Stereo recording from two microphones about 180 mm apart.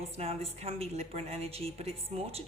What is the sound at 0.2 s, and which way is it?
A woman's voice, 35° right (ahead or behind).